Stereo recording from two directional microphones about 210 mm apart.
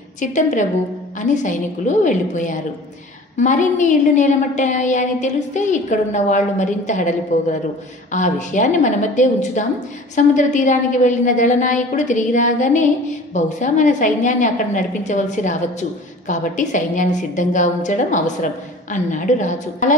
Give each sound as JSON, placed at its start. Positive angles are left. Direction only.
{"t": 0.2, "sound": "a woman's voice", "side_deg": 35}